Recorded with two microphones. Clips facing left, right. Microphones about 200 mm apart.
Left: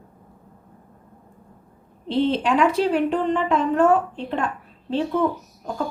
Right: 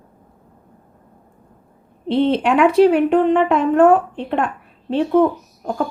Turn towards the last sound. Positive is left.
turn(degrees=-55)  # may be behind; listen again after turning